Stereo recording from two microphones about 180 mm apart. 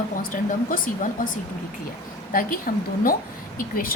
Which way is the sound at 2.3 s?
50° left (ahead or behind).